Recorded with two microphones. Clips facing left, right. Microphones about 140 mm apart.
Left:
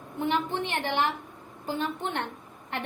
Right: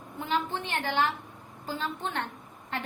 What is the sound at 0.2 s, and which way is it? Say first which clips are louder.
A woman's voice: left 3 dB; 20° left (ahead or behind).